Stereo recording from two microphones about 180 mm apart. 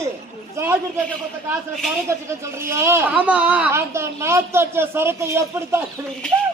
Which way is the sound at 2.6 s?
15° right (ahead or behind).